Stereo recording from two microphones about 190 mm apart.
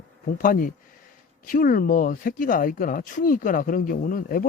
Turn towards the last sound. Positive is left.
turn(degrees=45)  # may be behind; listen again after turning